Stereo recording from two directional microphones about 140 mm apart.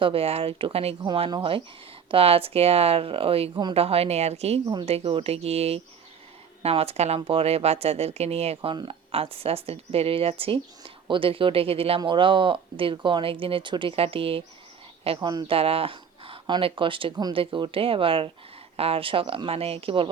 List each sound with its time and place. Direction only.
0.0 s speech: 45° right (ahead or behind)
1.0 s speech: 35° right (ahead or behind)
4.6 s speech: 30° right (ahead or behind)
4.9 s speech: 45° right (ahead or behind)
8.7 s speech: 35° right (ahead or behind)
15.3 s speech: 30° right (ahead or behind)
15.5 s speech: 40° right (ahead or behind)